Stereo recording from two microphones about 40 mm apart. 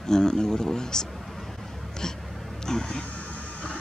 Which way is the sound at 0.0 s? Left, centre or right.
Centre.